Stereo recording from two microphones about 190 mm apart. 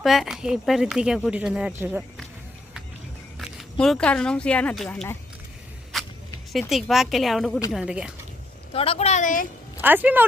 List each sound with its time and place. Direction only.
0.0 s speech: centre (ahead or behind)
3.3 s speech: centre (ahead or behind)
5.9 s vehicle: centre (ahead or behind)
6.5 s speech: centre (ahead or behind)
8.7 s a woman's voice: 30° left (ahead or behind)
9.8 s speech: 10° right (ahead or behind)